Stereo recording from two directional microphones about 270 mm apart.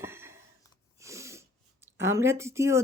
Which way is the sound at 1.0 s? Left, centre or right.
Centre.